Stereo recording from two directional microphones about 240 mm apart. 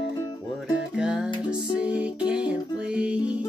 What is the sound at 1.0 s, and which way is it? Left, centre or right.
Music, centre.